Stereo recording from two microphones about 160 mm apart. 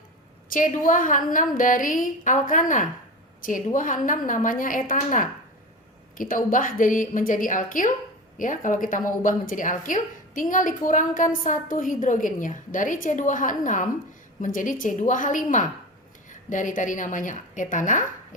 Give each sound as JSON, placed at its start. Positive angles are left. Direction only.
{"t": 0.5, "sound": "a woman's voice", "side_deg": 55}